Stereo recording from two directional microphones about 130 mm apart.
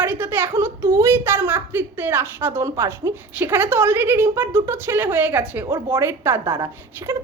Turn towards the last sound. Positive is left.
turn(degrees=-20)  # may be behind; listen again after turning